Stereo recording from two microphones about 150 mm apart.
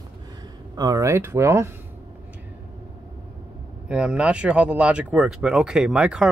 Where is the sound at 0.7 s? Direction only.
25° right (ahead or behind).